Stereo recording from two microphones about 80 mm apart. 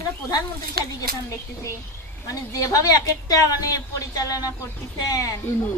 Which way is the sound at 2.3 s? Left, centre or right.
Left.